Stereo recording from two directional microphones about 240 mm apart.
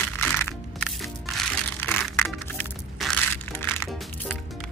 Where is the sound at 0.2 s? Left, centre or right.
Centre.